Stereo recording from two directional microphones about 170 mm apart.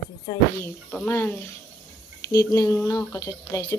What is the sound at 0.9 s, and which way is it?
Speech, 10° left (ahead or behind).